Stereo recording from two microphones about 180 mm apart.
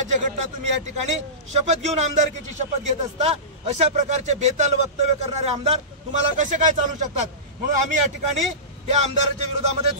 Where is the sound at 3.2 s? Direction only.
35° right (ahead or behind).